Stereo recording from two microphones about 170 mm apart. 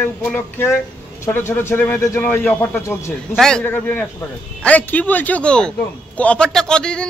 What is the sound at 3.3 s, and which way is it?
Speech, 5° left (ahead or behind).